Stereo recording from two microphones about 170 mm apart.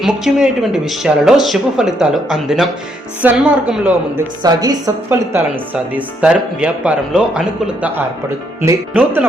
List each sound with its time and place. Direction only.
0.0 s speech: centre (ahead or behind)
4.4 s a woman's voice: 20° right (ahead or behind)
5.0 s speech: 10° right (ahead or behind)